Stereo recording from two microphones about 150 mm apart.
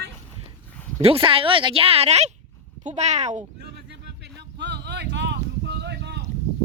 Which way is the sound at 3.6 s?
90° right.